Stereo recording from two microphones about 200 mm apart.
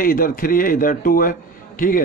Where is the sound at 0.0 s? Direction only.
45° left (ahead or behind).